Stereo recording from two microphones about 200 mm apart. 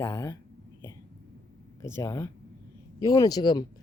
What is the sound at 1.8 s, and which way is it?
Speech, 15° left (ahead or behind).